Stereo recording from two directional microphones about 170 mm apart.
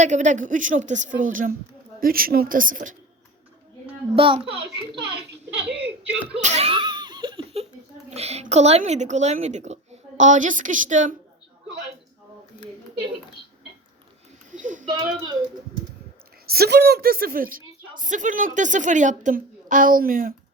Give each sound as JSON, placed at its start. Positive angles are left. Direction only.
{"t": 0.0, "sound": "a woman's voice", "side_deg": -45}
{"t": 3.8, "sound": "a child's voice", "side_deg": -35}
{"t": 5.6, "sound": "a sound", "side_deg": -5}
{"t": 6.3, "sound": "laughter", "side_deg": -40}
{"t": 8.1, "sound": "a woman's voice", "side_deg": -40}
{"t": 14.6, "sound": "speech", "side_deg": -50}
{"t": 14.8, "sound": "speech", "side_deg": -25}
{"t": 16.5, "sound": "a woman's voice", "side_deg": -70}